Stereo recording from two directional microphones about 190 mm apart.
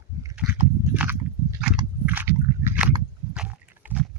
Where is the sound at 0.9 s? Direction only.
10° right (ahead or behind).